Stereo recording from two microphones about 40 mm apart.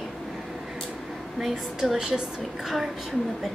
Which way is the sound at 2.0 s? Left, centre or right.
Centre.